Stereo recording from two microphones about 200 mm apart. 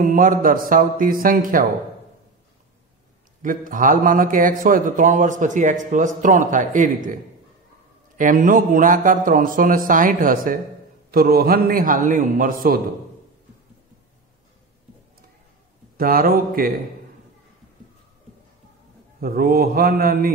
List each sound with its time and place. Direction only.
0.1 s a man's voice: 45° right (ahead or behind)
3.4 s a man's voice: 40° right (ahead or behind)
8.2 s a man's voice: 40° right (ahead or behind)
16.0 s a man's voice: 45° right (ahead or behind)
19.1 s a man's voice: 50° right (ahead or behind)